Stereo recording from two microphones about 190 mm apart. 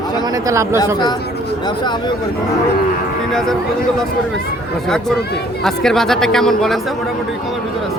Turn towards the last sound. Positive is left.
turn(degrees=0)  # may be behind; listen again after turning